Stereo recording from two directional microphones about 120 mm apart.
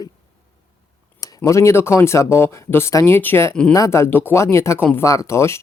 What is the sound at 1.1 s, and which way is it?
Speech, 30° left (ahead or behind).